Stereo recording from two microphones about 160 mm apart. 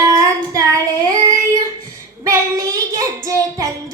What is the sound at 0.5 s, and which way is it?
Child singing, 20° right (ahead or behind).